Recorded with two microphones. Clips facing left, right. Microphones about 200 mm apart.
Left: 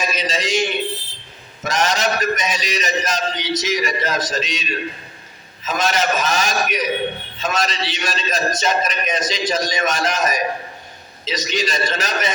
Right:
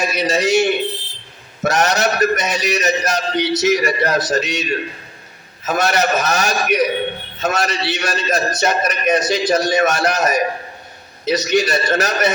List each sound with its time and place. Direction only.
0.0 s a man's voice: 70° right (ahead or behind)
5.6 s a man's voice: 70° right (ahead or behind)